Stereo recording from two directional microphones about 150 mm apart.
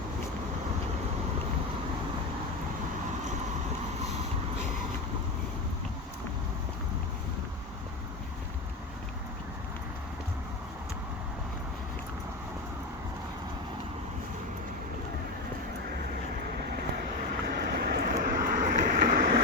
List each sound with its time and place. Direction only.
17.4 s vehicle: 90° right; by 19.3 s 60° right (ahead or behind)